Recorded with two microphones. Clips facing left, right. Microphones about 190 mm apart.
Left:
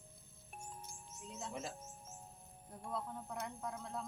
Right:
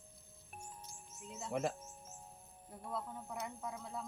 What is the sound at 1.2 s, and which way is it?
Speech, 5° right (ahead or behind).